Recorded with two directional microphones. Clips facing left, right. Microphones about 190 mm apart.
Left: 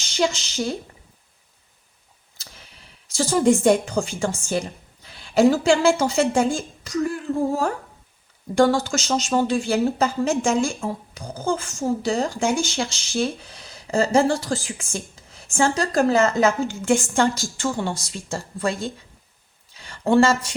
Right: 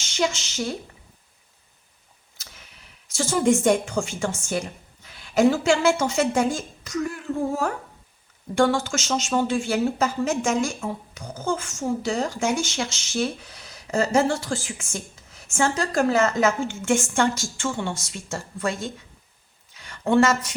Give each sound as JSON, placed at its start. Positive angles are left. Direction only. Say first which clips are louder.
{"t": 0.0, "sound": "a woman's voice", "louder": "left 2 dB", "side_deg": 35}
{"t": 2.4, "sound": "speech", "louder": "left 2 dB", "side_deg": 30}